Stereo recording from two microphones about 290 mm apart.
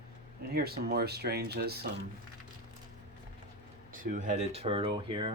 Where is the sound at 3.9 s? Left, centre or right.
Right.